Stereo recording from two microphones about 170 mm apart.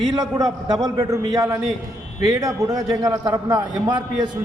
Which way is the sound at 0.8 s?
20° right (ahead or behind).